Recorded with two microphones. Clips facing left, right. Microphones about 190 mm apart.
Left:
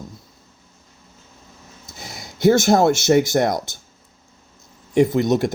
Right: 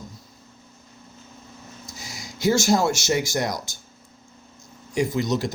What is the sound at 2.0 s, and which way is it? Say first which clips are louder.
A man's voice: left 7 dB; 60° left (ahead or behind).